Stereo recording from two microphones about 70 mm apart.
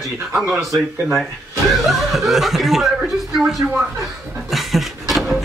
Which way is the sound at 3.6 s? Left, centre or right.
Centre.